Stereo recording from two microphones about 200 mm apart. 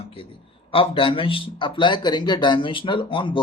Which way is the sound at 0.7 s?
25° left (ahead or behind).